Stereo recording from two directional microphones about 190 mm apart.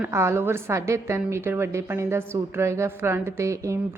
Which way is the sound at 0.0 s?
15° right (ahead or behind).